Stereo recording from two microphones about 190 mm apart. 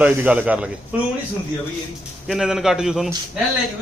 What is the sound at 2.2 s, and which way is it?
Speech, centre (ahead or behind).